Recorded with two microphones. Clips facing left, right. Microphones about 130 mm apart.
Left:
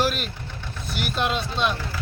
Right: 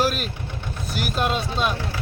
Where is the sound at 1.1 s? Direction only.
5° right (ahead or behind).